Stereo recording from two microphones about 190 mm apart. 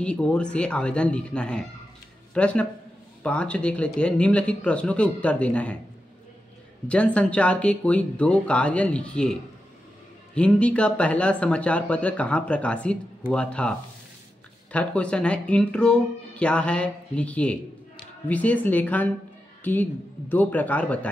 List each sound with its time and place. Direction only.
0.0 s speech: 5° left (ahead or behind)
6.9 s speech: 5° left (ahead or behind)